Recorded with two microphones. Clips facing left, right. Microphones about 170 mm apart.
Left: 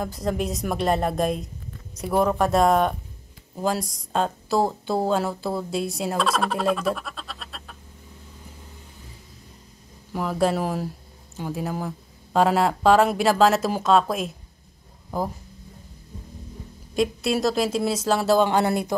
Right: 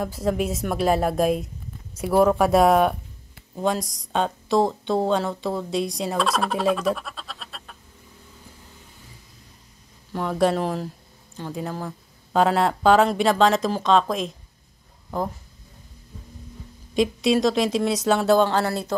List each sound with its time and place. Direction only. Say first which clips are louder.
0.0 s speech: right 2 dB; centre (ahead or behind)
10.1 s speech: right 1 dB; centre (ahead or behind)
16.9 s speech: right 3 dB; centre (ahead or behind)
18.4 s speech: left 1 dB; 15° left (ahead or behind)